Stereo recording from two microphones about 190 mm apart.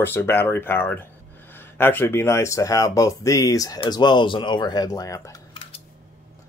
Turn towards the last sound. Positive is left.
turn(degrees=20)  # may be behind; listen again after turning